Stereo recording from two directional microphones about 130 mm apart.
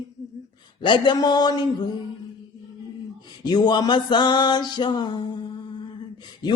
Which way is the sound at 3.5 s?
35° left (ahead or behind).